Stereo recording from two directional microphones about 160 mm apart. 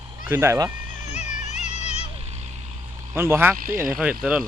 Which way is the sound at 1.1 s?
45° left (ahead or behind).